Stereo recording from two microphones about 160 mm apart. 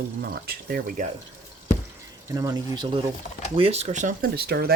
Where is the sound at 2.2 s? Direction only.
20° right (ahead or behind).